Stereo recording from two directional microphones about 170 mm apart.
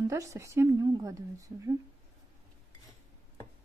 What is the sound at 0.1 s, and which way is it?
Speech, 15° right (ahead or behind).